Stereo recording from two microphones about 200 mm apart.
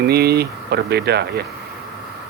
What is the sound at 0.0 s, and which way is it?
Speech, 55° right (ahead or behind).